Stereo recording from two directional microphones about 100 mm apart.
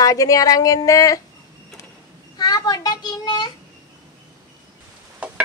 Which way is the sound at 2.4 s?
40° left (ahead or behind).